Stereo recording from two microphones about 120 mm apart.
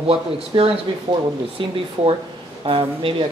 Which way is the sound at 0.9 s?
40° right (ahead or behind).